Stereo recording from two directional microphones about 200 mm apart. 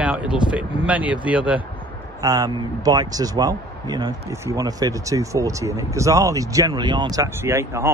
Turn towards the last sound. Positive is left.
turn(degrees=-15)  # may be behind; listen again after turning